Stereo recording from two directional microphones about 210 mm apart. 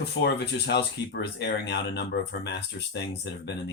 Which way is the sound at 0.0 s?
50° left (ahead or behind).